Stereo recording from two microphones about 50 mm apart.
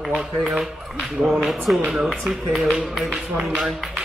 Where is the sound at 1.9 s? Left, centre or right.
Centre.